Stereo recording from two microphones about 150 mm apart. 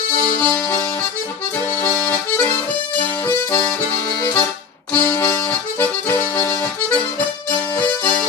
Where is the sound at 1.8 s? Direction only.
20° left (ahead or behind).